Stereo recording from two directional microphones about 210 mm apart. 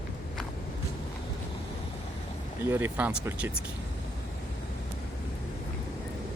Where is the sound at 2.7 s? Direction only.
10° right (ahead or behind).